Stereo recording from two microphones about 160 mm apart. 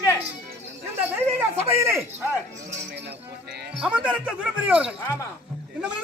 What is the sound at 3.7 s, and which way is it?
Speech, 5° right (ahead or behind).